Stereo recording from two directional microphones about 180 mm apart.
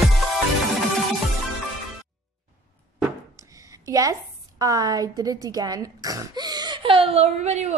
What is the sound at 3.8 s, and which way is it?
A woman's voice, 20° right (ahead or behind).